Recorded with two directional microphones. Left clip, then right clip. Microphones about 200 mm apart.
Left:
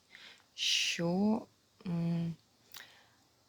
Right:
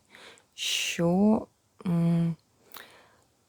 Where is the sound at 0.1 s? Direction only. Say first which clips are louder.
Right 4 dB; 30° right (ahead or behind).